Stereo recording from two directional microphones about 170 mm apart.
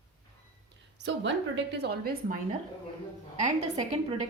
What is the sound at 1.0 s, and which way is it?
A woman's voice, 90° right.